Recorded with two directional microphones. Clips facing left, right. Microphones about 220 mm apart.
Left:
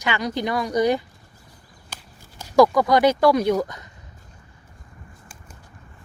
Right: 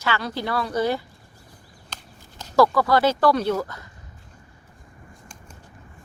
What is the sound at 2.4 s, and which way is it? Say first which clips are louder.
Speech: left 3 dB; 15° left (ahead or behind).